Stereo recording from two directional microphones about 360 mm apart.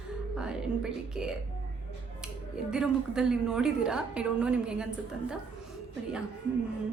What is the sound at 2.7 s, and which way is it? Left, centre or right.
A woman's voice, centre.